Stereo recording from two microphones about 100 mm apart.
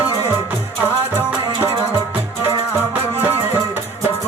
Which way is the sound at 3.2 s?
20° right (ahead or behind).